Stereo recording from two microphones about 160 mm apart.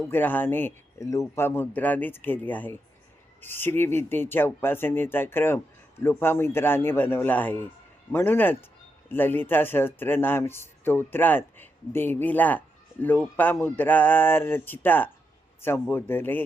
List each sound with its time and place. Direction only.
0.1 s speech: 10° left (ahead or behind)